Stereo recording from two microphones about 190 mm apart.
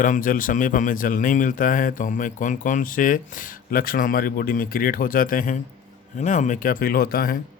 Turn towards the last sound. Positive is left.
turn(degrees=50)  # may be behind; listen again after turning